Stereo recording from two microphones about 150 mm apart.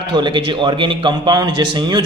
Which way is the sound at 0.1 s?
30° right (ahead or behind).